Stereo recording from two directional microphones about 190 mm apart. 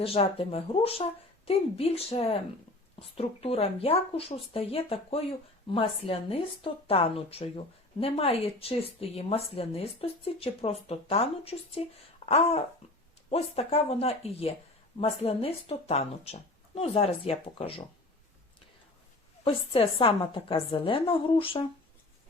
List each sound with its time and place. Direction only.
0.0 s a woman's voice: 30° left (ahead or behind)
19.5 s a woman's voice: 30° left (ahead or behind)